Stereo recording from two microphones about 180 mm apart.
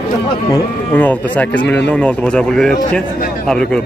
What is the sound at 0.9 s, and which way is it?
A man's voice, 10° left (ahead or behind).